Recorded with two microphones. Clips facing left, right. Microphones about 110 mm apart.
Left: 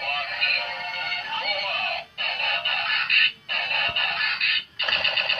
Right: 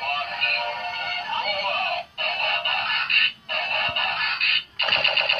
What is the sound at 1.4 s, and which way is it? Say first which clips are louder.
Music: right 3 dB; 40° right (ahead or behind).